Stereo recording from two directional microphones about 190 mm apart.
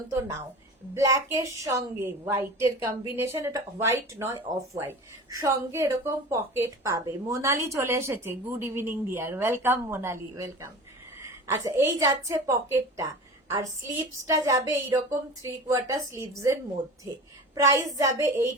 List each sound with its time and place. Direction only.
0.9 s a woman's voice: 15° right (ahead or behind)
17.5 s a woman's voice: 20° right (ahead or behind)